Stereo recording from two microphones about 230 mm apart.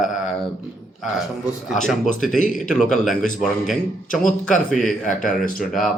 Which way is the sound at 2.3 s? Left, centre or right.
Left.